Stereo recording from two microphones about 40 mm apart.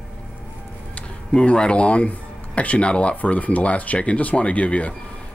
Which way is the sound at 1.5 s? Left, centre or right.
Left.